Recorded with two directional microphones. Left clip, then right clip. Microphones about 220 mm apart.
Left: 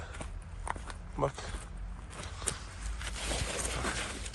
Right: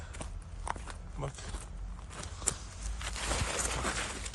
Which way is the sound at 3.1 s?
Centre (ahead or behind).